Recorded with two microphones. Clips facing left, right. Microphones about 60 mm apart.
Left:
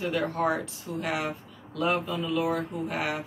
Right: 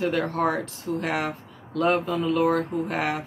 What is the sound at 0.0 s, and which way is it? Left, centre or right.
Speech, right.